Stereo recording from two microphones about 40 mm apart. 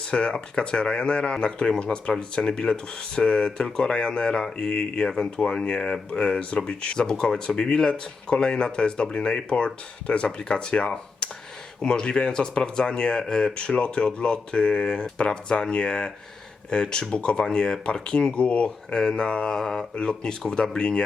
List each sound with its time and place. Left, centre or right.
0.0 s speech: left